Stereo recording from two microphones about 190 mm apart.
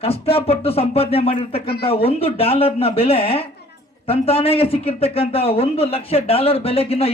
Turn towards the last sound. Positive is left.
turn(degrees=30)  # may be behind; listen again after turning